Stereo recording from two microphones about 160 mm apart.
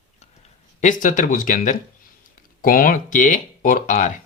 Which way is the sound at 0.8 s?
55° left (ahead or behind).